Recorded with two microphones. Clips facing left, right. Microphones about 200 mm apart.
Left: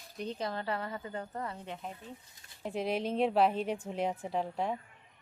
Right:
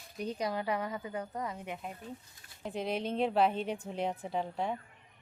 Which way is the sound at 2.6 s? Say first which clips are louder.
Left 2 dB; centre (ahead or behind).